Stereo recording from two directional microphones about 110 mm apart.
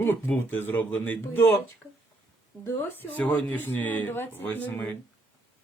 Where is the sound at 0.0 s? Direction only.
20° left (ahead or behind).